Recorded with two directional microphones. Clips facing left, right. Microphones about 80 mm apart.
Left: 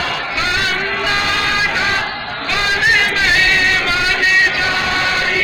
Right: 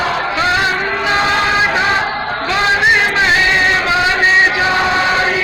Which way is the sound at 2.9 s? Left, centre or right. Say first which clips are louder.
Right 2 dB; right.